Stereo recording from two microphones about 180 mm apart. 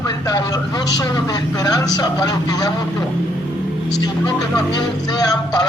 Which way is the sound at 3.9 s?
20° left (ahead or behind).